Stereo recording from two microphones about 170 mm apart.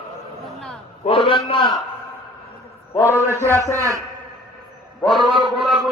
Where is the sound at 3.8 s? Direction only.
20° right (ahead or behind).